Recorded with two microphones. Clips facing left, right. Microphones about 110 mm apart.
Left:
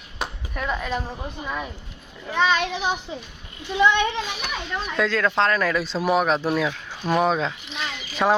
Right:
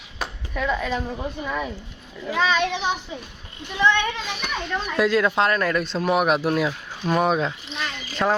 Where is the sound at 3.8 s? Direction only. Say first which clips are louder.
Even; 15° left (ahead or behind).